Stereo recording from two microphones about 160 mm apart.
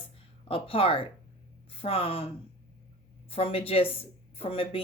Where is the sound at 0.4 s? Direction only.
35° left (ahead or behind).